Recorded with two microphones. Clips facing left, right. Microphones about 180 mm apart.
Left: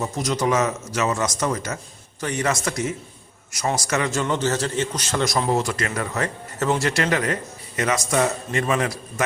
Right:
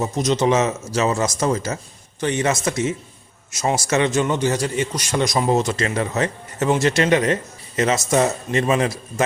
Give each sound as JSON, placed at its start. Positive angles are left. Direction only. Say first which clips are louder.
{"t": 0.0, "sound": "a man's voice", "louder": "right 4 dB", "side_deg": -20}